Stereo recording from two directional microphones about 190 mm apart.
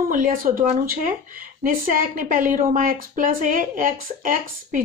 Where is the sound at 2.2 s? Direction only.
45° right (ahead or behind).